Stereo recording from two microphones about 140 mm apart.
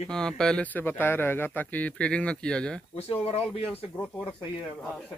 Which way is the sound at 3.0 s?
45° left (ahead or behind).